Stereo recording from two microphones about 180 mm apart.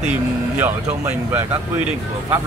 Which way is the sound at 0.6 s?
10° right (ahead or behind).